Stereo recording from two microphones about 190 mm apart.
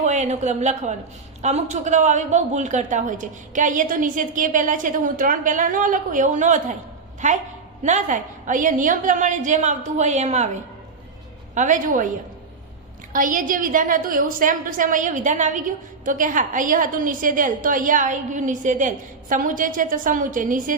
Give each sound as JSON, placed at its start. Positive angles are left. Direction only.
{"t": 0.0, "sound": "a woman's voice", "side_deg": -40}
{"t": 13.1, "sound": "a woman's voice", "side_deg": -45}